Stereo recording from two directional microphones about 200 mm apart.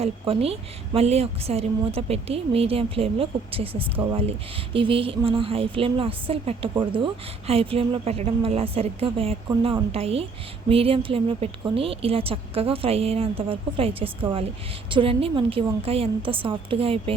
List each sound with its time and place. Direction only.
0.0 s a woman's voice: 30° right (ahead or behind)